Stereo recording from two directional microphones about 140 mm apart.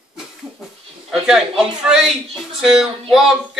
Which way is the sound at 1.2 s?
5° right (ahead or behind).